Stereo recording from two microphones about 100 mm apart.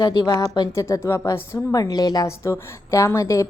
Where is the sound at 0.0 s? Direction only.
45° left (ahead or behind).